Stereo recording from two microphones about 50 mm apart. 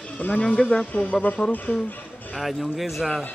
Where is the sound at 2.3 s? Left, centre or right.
Centre.